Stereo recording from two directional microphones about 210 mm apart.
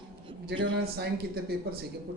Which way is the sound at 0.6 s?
50° right (ahead or behind).